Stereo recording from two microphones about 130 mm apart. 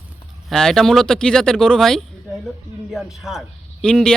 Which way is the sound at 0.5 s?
5° left (ahead or behind).